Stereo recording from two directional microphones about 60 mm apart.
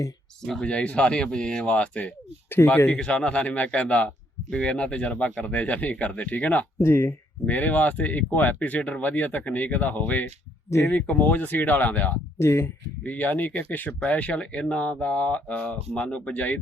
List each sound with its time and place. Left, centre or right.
0.6 s speech: centre
2.6 s speech: left
3.0 s speech: centre
6.8 s speech: left
7.4 s speech: left
12.4 s speech: left
13.1 s speech: left